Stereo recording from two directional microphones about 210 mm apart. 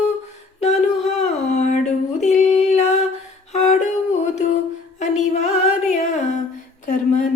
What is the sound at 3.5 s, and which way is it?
Music, 35° left (ahead or behind).